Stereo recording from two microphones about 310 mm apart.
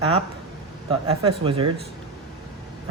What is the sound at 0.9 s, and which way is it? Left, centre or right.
Speech, centre.